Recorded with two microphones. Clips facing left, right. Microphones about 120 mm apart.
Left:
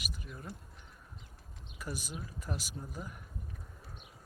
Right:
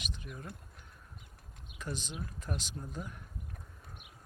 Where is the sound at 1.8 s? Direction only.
10° left (ahead or behind).